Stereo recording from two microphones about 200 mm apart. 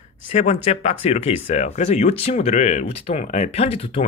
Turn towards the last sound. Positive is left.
turn(degrees=30)  # may be behind; listen again after turning